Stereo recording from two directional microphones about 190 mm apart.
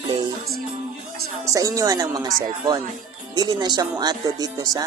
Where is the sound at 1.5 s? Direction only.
20° right (ahead or behind).